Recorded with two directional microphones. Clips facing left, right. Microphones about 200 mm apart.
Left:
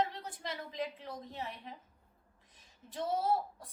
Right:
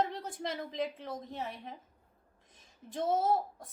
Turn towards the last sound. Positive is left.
turn(degrees=-45)  # may be behind; listen again after turning